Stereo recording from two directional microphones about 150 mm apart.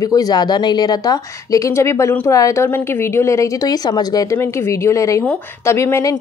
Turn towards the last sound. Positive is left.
turn(degrees=20)  # may be behind; listen again after turning